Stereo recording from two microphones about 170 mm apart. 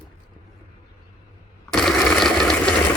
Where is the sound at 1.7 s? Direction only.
Centre (ahead or behind).